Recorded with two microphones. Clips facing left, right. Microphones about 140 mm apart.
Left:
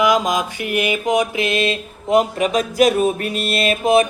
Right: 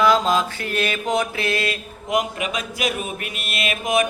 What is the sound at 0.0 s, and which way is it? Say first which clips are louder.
Mantra: left 1 dB; 15° left (ahead or behind).